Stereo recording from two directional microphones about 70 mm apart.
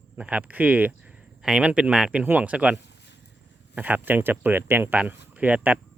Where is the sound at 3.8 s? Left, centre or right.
Right.